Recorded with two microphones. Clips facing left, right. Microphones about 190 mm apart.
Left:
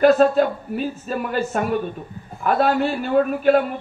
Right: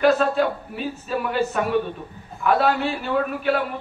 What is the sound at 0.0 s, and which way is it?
A man's voice, 40° left (ahead or behind).